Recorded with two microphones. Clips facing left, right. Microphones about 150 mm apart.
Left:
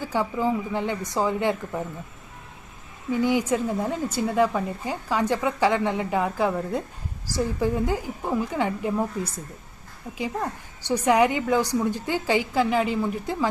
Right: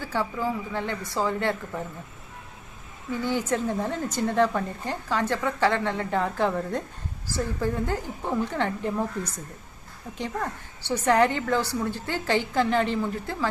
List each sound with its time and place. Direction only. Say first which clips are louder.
0.0 s a woman's voice: left 3 dB; 15° left (ahead or behind)
3.1 s a woman's voice: left 4 dB; 15° left (ahead or behind)